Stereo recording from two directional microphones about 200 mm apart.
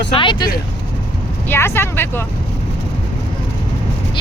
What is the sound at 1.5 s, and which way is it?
Speech, 10° left (ahead or behind).